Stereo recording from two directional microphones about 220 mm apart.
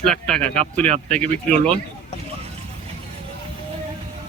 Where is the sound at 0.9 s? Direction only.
30° right (ahead or behind).